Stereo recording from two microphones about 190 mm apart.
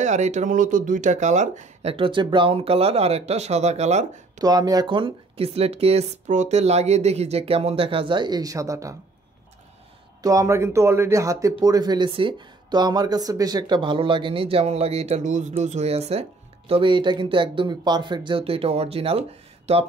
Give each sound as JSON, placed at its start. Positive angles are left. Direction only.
{"t": 0.0, "sound": "speech", "side_deg": -40}
{"t": 4.4, "sound": "speech", "side_deg": -20}
{"t": 10.2, "sound": "speech", "side_deg": -15}